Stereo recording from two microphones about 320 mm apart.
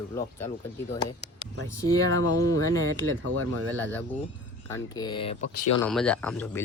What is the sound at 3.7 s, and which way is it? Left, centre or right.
Speech, centre.